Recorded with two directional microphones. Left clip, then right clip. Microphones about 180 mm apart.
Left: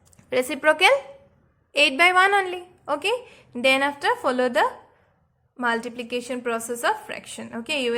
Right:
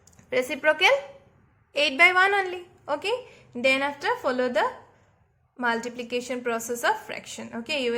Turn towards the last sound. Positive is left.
turn(degrees=15)  # may be behind; listen again after turning